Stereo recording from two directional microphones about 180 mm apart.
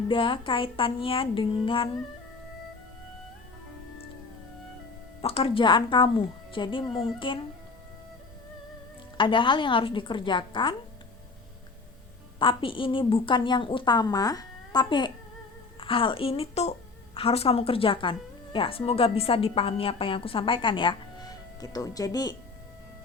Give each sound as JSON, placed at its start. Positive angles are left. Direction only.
{"t": 0.1, "sound": "a woman's voice", "side_deg": 30}
{"t": 5.2, "sound": "a woman's voice", "side_deg": 30}
{"t": 9.1, "sound": "a woman's voice", "side_deg": 30}
{"t": 12.4, "sound": "a woman's voice", "side_deg": 30}